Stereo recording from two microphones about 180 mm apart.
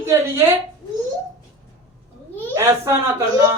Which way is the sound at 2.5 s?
15° right (ahead or behind).